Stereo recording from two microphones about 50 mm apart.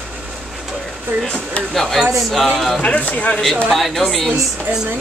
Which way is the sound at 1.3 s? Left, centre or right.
Left.